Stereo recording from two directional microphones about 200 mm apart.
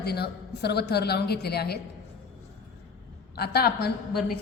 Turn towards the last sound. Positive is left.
turn(degrees=50)  # may be behind; listen again after turning